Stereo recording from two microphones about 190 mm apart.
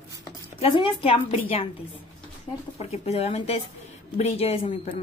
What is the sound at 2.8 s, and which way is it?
Speech, 35° left (ahead or behind).